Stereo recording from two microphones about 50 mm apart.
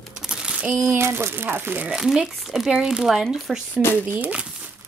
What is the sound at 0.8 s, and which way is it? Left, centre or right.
Speech, right.